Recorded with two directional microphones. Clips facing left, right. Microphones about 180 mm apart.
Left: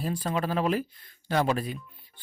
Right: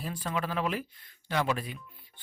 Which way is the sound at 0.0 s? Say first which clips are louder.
Left 5 dB; 35° left (ahead or behind).